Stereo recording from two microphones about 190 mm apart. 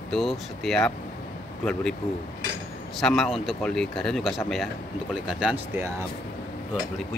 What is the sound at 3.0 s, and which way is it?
Speech, 5° left (ahead or behind).